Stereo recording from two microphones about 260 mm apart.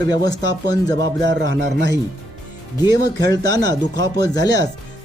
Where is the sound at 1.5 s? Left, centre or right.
Right.